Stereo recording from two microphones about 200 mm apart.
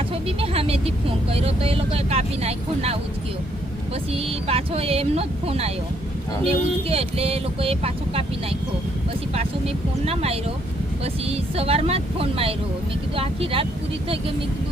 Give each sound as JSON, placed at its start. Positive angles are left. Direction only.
{"t": 0.1, "sound": "speech", "side_deg": -30}
{"t": 4.1, "sound": "speech", "side_deg": -30}
{"t": 9.3, "sound": "speech", "side_deg": -30}